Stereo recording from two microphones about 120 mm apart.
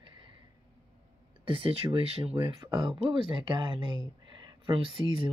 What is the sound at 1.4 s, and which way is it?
Speech, 45° right (ahead or behind).